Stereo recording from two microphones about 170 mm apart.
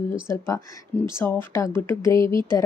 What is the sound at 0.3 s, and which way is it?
Speech, 15° left (ahead or behind).